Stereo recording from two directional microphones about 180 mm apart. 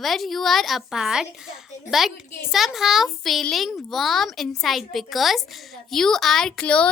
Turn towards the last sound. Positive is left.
turn(degrees=5)  # may be behind; listen again after turning